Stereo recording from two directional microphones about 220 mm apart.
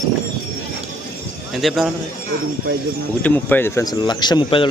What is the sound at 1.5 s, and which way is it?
Speech, centre (ahead or behind).